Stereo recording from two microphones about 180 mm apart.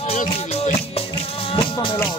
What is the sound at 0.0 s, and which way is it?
Music, 40° left (ahead or behind).